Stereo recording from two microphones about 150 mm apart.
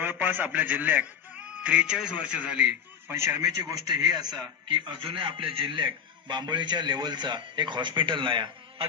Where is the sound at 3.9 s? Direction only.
30° right (ahead or behind).